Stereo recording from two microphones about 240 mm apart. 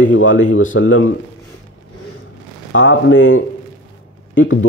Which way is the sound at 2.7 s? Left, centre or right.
Left.